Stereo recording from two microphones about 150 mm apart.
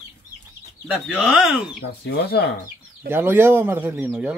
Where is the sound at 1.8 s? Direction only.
90° left.